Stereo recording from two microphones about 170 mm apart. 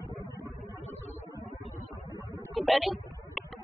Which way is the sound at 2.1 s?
20° right (ahead or behind).